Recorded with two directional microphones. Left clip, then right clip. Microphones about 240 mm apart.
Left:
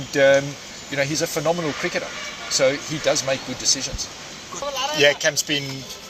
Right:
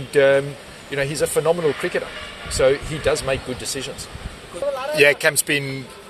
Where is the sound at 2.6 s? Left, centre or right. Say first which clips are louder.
Right 3 dB; right.